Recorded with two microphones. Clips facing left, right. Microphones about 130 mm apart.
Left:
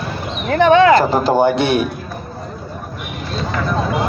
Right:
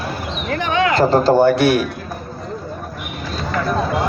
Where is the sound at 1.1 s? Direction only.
15° left (ahead or behind).